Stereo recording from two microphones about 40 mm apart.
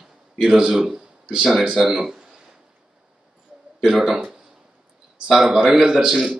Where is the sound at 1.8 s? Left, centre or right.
Centre.